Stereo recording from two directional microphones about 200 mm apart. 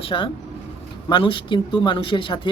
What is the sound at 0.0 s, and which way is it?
Speech, 25° left (ahead or behind).